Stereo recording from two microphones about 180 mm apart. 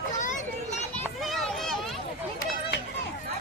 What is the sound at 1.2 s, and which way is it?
Children playing, centre (ahead or behind).